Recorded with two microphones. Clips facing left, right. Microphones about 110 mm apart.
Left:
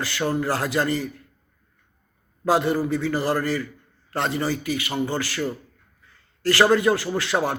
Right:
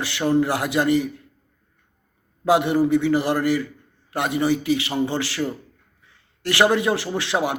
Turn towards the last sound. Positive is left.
turn(degrees=-15)  # may be behind; listen again after turning